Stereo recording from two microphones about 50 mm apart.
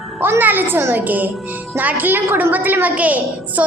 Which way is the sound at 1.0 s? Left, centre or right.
Right.